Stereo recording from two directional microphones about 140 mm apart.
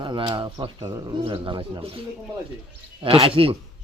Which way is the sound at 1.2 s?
35° right (ahead or behind).